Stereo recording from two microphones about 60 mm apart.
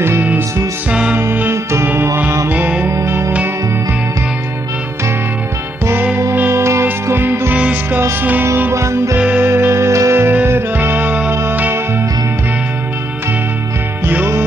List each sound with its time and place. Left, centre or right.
0.8 s music: centre
1.5 s music: right
3.1 s music: right
6.5 s music: right
8.7 s music: right
9.4 s music: right
10.3 s music: right
14.0 s music: right